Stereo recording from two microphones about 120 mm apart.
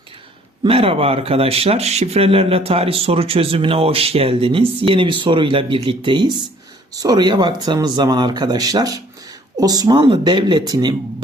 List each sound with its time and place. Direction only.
0.6 s speech: 50° right (ahead or behind)